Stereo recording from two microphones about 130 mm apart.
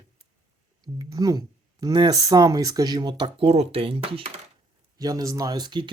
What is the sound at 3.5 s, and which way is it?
Speech, 50° right (ahead or behind).